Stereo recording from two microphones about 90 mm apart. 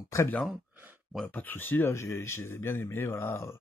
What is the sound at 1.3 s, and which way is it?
Speech, 20° left (ahead or behind).